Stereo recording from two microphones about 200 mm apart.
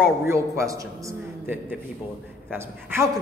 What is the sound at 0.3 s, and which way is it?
Speech, 15° right (ahead or behind).